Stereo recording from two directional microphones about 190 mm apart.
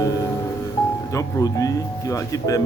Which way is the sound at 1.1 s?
15° left (ahead or behind).